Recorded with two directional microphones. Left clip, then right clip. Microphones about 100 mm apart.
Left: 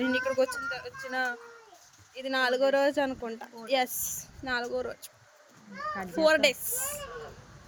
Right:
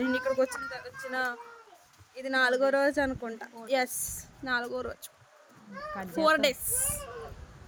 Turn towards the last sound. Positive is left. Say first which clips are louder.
# even
turn(degrees=-35)  # may be behind; listen again after turning